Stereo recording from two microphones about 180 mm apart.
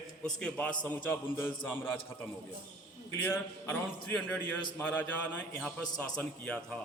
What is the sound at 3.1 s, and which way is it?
A man's voice, 10° left (ahead or behind).